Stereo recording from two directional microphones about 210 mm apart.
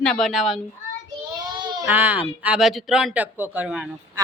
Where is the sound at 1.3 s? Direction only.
20° right (ahead or behind).